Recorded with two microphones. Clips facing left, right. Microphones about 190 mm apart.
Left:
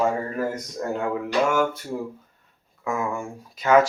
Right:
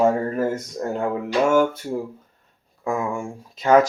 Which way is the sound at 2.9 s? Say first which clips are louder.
Right 3 dB; 30° right (ahead or behind).